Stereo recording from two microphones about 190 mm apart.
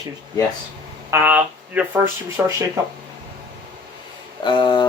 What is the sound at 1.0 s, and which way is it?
Speech, 10° right (ahead or behind).